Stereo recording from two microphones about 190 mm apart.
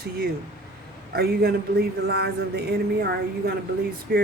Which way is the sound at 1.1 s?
55° right (ahead or behind).